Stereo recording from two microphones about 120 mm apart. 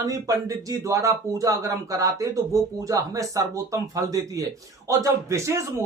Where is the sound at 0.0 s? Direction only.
30° right (ahead or behind).